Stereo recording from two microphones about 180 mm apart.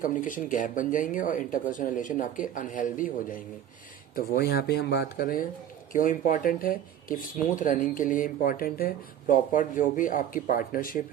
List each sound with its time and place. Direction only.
0.0 s speech: 45° left (ahead or behind)
4.1 s speech: 60° left (ahead or behind)